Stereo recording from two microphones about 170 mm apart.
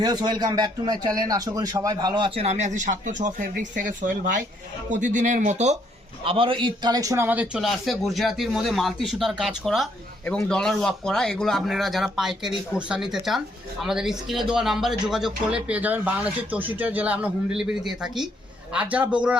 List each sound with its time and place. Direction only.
0.0 s a man's voice: 25° right (ahead or behind); by 5.7 s 45° right (ahead or behind)
6.2 s a man's voice: 30° right (ahead or behind); by 19.4 s 5° right (ahead or behind)